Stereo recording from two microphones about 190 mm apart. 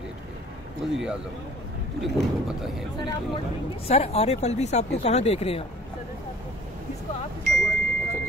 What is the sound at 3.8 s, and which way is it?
Speech, 30° left (ahead or behind).